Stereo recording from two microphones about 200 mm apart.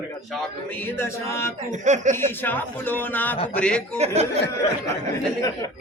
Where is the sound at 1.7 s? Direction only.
35° right (ahead or behind).